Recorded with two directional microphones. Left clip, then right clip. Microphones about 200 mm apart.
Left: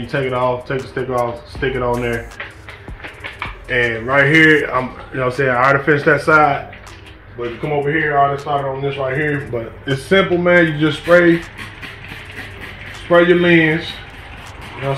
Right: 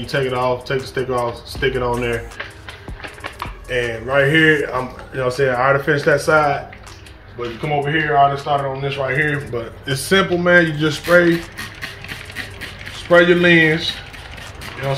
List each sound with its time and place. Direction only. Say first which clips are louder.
0.0 s speech: left 1 dB; 25° left (ahead or behind)
3.7 s speech: left 3 dB; 30° left (ahead or behind)
7.8 s speech: even; 5° left (ahead or behind)
8.8 s speech: even; 15° left (ahead or behind)
9.5 s speech: left 2 dB; 25° left (ahead or behind)
13.1 s speech: even; 20° left (ahead or behind)